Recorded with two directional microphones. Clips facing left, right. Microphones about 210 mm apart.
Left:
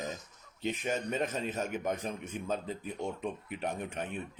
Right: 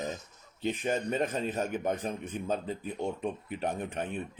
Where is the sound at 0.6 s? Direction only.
30° right (ahead or behind).